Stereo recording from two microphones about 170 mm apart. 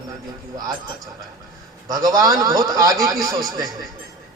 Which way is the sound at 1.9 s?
20° right (ahead or behind).